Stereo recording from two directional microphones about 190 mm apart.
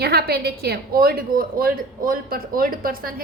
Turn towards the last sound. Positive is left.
turn(degrees=-50)  # may be behind; listen again after turning